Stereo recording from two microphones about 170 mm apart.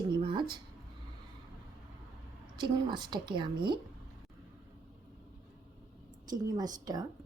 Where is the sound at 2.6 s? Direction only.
25° right (ahead or behind).